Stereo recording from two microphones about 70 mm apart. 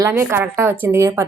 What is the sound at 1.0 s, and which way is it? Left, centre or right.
Speech, right.